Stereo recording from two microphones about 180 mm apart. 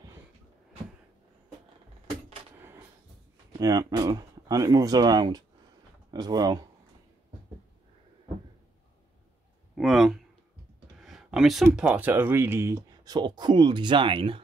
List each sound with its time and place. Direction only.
3.5 s speech: 20° right (ahead or behind)
9.8 s a sound: centre (ahead or behind)
11.6 s speech: 10° right (ahead or behind); by 14.4 s 30° right (ahead or behind)